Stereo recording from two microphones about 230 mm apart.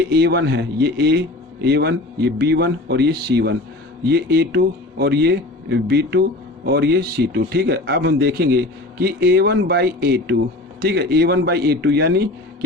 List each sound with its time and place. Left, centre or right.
0.1 s speech: right